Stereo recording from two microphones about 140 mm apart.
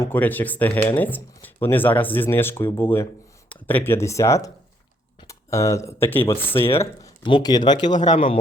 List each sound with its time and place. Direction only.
0.0 s speech: 15° left (ahead or behind)
7.3 s speech: 30° left (ahead or behind)